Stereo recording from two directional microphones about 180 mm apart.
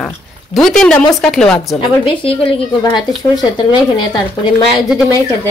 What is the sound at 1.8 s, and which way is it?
Speech, 30° left (ahead or behind).